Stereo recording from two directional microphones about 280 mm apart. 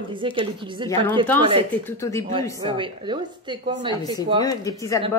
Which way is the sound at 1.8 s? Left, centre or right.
Centre.